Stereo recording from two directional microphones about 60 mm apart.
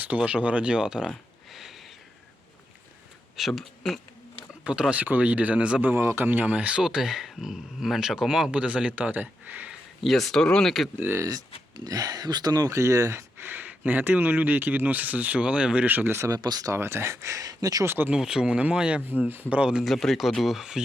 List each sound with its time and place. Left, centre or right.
0.2 s speech: centre
1.5 s a sound: centre
3.3 s speech: centre
4.6 s speech: centre
5.8 s speech: right
6.8 s speech: centre; by 9.7 s right
10.0 s speech: centre
11.9 s speech: right
13.4 s speech: right
16.1 s speech: right
16.7 s speech: right
17.8 s speech: right
18.1 s speech: centre
19.8 s speech: centre